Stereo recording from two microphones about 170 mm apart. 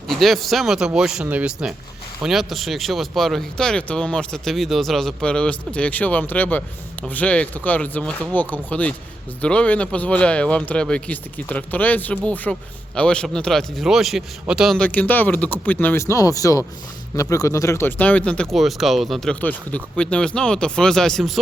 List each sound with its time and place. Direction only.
0.2 s speech: centre (ahead or behind)